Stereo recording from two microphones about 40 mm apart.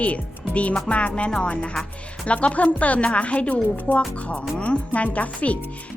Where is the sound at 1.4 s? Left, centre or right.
Left.